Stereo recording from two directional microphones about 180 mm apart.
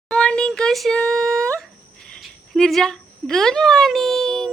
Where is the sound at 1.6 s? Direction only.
Centre (ahead or behind).